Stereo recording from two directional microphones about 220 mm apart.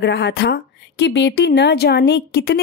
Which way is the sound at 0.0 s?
50° left (ahead or behind).